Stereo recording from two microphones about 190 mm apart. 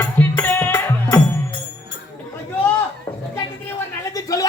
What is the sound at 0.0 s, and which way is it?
Music, 10° left (ahead or behind).